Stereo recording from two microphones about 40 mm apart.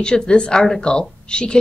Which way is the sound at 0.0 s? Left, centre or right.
Left.